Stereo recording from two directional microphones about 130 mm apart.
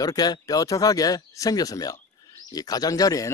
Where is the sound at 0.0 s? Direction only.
30° left (ahead or behind).